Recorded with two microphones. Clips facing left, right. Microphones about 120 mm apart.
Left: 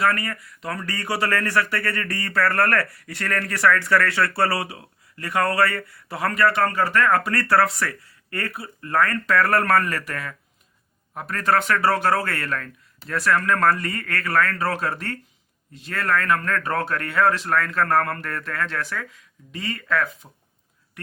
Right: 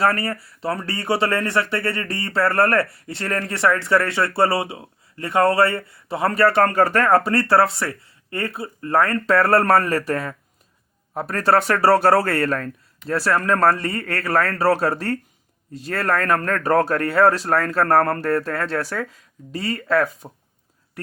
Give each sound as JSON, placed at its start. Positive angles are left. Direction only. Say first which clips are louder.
{"t": 0.0, "sound": "speech", "louder": "right 3 dB", "side_deg": -35}